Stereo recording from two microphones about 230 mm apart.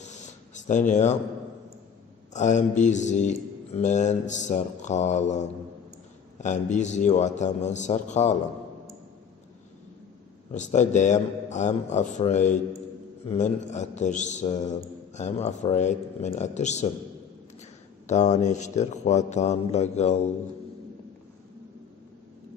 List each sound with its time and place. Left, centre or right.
0.0 s a sound: left
2.3 s mantra: left
10.5 s mantra: left
18.0 s a man's voice: left